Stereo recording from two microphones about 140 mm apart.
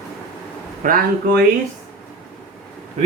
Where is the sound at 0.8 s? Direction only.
80° right.